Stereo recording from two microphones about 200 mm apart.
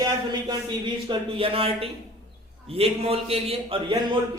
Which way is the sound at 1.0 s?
30° right (ahead or behind).